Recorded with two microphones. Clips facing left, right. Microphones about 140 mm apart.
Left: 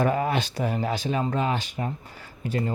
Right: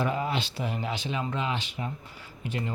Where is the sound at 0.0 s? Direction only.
50° left (ahead or behind).